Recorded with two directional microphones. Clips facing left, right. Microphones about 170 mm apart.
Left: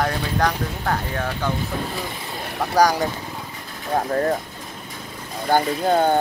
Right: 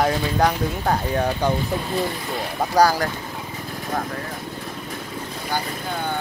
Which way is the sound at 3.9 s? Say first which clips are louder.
Left 7 dB; 45° left (ahead or behind).